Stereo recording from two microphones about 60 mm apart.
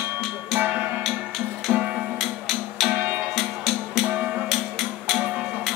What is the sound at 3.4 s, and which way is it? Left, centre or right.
Music, centre.